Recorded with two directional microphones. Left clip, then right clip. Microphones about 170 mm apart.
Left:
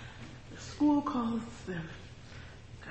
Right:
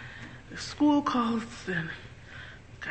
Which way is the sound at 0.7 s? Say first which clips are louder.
Right 4 dB; 15° right (ahead or behind).